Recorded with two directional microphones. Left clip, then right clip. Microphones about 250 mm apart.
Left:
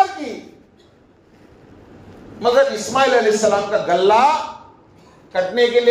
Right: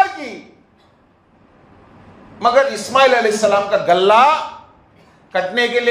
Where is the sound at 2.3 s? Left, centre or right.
Right.